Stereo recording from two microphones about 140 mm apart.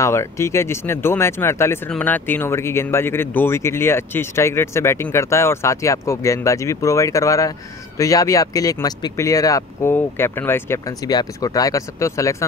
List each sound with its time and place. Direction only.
0.0 s speech: 20° left (ahead or behind)